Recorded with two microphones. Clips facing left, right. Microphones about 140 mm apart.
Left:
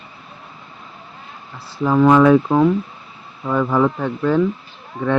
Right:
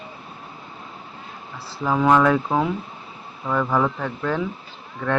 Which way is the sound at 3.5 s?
10° left (ahead or behind).